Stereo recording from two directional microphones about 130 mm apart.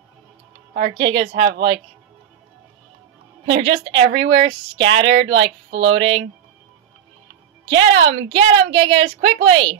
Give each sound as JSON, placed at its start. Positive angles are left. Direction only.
{"t": 0.9, "sound": "speech", "side_deg": -40}
{"t": 3.4, "sound": "speech", "side_deg": -45}
{"t": 7.7, "sound": "speech", "side_deg": -45}